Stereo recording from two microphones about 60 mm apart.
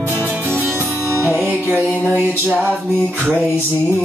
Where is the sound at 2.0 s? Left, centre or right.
Right.